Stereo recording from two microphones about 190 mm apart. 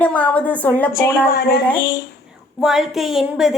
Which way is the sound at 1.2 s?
50° left (ahead or behind).